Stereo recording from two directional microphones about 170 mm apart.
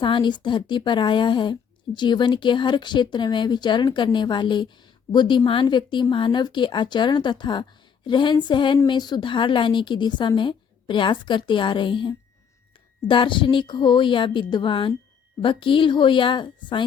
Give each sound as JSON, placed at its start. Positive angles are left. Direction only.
{"t": 0.0, "sound": "a woman's voice", "side_deg": 30}